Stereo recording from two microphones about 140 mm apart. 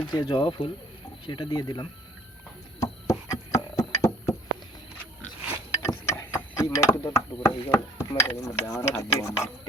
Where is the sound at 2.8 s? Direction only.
25° left (ahead or behind).